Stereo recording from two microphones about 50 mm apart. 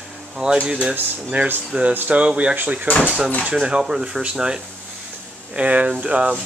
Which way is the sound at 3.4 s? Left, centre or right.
Centre.